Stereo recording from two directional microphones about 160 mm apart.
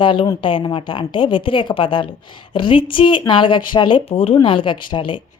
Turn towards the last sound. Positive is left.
turn(degrees=30)  # may be behind; listen again after turning